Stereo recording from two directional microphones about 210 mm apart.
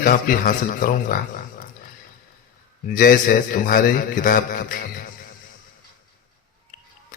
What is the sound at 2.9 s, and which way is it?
A man's voice, 45° left (ahead or behind).